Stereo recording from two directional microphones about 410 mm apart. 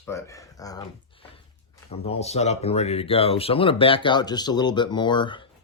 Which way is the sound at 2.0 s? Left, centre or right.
Centre.